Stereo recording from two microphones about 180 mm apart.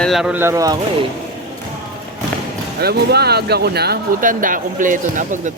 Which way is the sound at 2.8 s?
60° right (ahead or behind).